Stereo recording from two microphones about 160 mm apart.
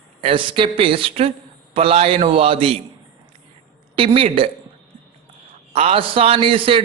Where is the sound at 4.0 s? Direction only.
35° right (ahead or behind).